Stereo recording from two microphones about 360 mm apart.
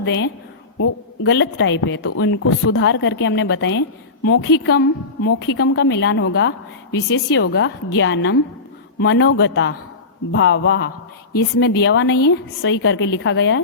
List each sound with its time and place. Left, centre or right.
0.0 s a woman's voice: left